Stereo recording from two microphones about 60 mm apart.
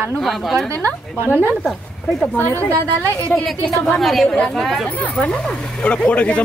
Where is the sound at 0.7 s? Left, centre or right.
Left.